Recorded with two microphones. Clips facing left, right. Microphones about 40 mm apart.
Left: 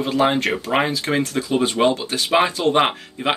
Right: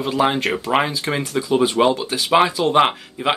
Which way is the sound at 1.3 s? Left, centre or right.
Centre.